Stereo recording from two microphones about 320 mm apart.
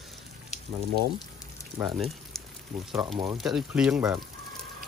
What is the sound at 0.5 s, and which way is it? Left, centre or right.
Frying, left.